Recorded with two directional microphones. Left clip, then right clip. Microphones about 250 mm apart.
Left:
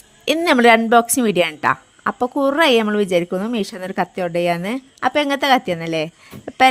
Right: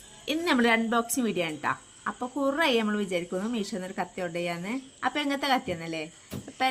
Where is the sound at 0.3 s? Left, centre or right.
Left.